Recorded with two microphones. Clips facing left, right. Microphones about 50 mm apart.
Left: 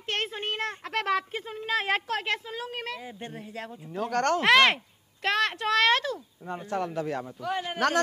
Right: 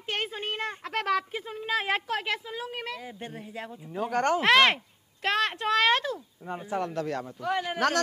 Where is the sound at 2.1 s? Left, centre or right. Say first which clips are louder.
Left 1 dB; centre.